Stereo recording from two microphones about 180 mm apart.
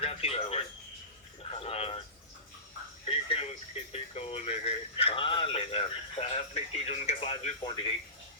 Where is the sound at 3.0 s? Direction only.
35° left (ahead or behind).